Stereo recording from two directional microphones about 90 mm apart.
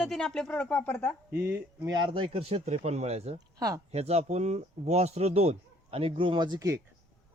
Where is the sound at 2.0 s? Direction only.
80° right.